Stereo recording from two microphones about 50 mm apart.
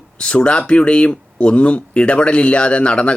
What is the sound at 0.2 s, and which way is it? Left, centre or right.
Speech, left.